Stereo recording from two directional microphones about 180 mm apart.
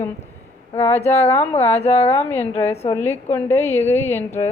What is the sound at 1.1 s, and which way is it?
Speech, 10° left (ahead or behind).